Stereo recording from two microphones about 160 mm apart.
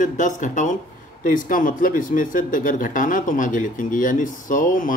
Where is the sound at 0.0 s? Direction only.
55° left (ahead or behind).